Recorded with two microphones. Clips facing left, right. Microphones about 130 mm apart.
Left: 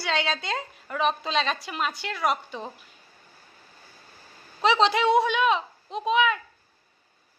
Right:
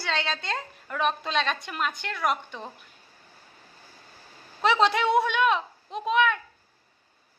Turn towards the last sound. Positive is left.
turn(degrees=0)  # may be behind; listen again after turning